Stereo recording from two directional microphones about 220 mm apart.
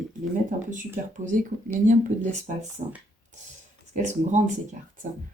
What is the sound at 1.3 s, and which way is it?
Speech, 35° right (ahead or behind).